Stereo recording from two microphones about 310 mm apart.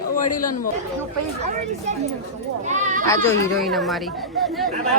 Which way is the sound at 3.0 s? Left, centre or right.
Centre.